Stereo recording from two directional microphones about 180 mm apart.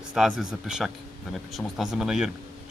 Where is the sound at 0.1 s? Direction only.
5° right (ahead or behind).